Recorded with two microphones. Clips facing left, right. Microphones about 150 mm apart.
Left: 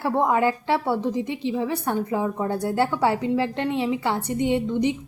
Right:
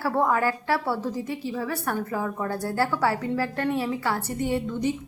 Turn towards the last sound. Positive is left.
turn(degrees=20)  # may be behind; listen again after turning